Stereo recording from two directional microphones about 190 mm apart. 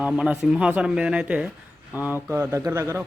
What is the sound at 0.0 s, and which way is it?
A man's voice, 5° right (ahead or behind).